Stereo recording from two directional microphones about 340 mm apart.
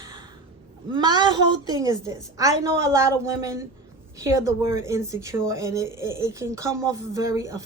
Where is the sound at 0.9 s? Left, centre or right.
Centre.